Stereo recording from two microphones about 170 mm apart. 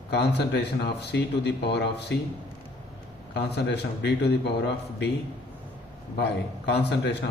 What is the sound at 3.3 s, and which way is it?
A man's voice, 80° left.